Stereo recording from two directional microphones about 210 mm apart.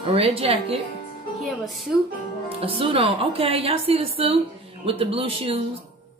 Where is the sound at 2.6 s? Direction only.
25° right (ahead or behind).